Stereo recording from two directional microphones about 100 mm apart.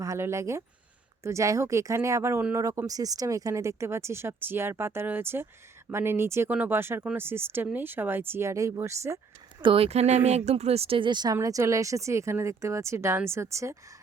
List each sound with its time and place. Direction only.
0.0 s speech: 30° right (ahead or behind)
9.6 s speech: 65° right (ahead or behind); by 11.3 s 45° right (ahead or behind)
11.3 s speech: 30° right (ahead or behind)